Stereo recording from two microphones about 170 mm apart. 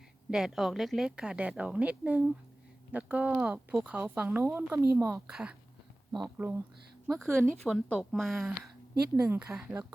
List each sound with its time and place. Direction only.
0.3 s a woman's voice: 5° right (ahead or behind)